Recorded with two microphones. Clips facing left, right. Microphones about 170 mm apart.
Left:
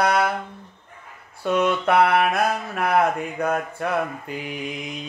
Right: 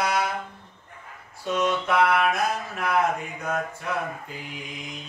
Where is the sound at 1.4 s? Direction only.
60° left (ahead or behind).